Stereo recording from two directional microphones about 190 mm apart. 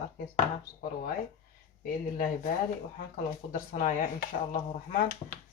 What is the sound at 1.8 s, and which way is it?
Speech, 45° left (ahead or behind).